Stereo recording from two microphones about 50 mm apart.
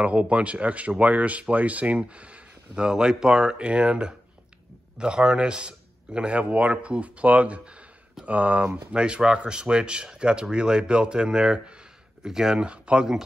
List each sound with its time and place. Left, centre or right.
0.0 s a man's voice: right; by 12.6 s centre
12.6 s speech: right